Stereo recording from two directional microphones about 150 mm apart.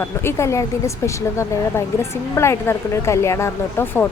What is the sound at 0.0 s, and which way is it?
A woman's voice, 15° left (ahead or behind).